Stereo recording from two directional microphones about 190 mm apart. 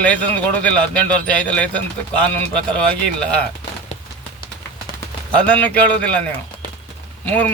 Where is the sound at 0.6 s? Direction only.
5° left (ahead or behind).